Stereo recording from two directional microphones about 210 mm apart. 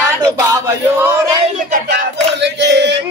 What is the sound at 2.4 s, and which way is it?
Male singing, 55° right (ahead or behind).